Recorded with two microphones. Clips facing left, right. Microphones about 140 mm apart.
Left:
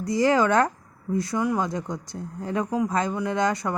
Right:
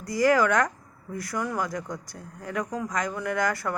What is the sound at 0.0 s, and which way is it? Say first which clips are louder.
Speech: left 1 dB; 25° left (ahead or behind).